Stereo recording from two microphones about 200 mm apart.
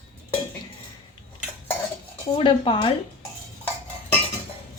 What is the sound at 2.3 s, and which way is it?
Speech, 25° left (ahead or behind).